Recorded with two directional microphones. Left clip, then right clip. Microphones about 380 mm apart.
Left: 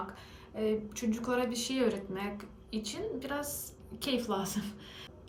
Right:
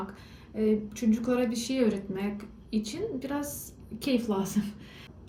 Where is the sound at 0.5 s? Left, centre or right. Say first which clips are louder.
Right 4 dB; centre.